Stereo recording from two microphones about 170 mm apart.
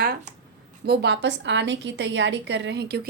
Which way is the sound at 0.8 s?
80° right.